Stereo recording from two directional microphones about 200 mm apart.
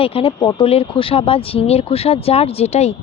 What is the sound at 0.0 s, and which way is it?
Speech, 25° left (ahead or behind).